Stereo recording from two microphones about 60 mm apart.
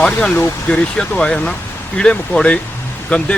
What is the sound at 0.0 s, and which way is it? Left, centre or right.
Speech, centre.